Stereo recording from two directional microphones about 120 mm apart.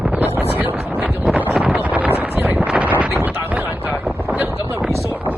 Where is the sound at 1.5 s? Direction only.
Centre (ahead or behind).